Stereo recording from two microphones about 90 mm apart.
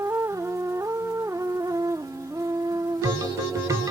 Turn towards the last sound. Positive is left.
turn(degrees=-40)  # may be behind; listen again after turning